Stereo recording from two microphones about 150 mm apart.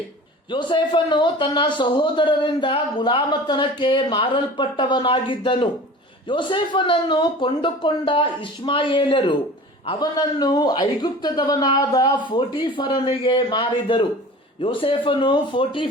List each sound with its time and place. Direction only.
0.5 s a man's voice: 30° left (ahead or behind)